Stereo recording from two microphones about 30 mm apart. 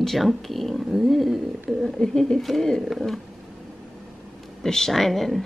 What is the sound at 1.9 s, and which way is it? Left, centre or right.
Speech, centre.